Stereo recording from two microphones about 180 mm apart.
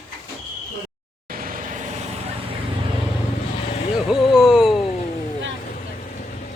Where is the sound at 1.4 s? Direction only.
50° right (ahead or behind).